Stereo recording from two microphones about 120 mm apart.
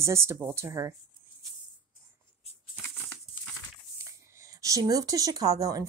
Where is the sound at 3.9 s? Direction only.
25° right (ahead or behind).